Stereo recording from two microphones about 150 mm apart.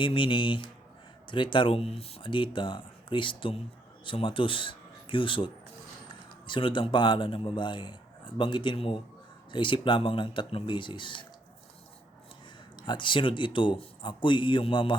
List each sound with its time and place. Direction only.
0.0 s a man's voice: 35° left (ahead or behind)
6.5 s a man's voice: 35° left (ahead or behind)
12.7 s a man's voice: 30° left (ahead or behind)